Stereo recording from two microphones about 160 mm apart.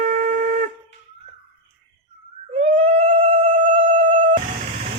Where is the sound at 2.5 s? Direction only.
55° right (ahead or behind).